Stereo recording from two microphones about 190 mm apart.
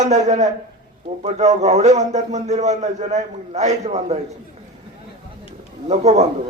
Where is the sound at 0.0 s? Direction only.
40° right (ahead or behind).